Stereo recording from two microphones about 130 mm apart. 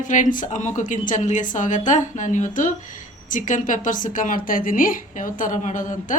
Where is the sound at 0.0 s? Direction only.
75° left (ahead or behind).